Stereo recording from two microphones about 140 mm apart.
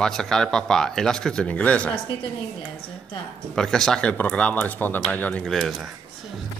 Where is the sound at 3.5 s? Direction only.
5° left (ahead or behind).